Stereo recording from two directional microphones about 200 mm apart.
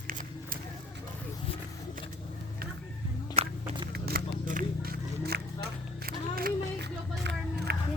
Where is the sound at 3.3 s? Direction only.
30° right (ahead or behind).